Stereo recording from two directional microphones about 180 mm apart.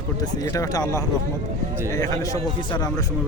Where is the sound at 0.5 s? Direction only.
20° left (ahead or behind).